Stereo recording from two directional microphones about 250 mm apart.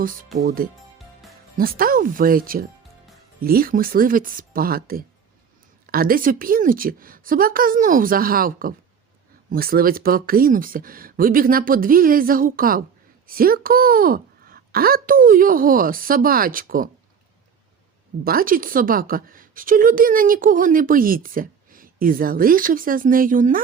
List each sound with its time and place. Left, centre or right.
0.3 s a woman's voice: right
18.2 s a woman's voice: right